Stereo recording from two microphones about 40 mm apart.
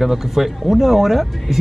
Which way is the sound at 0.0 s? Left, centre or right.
Centre.